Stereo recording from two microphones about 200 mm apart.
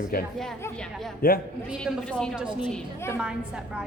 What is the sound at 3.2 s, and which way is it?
Speech, 5° right (ahead or behind).